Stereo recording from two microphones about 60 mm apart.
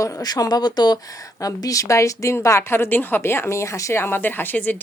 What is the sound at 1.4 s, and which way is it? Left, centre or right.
Speech, left.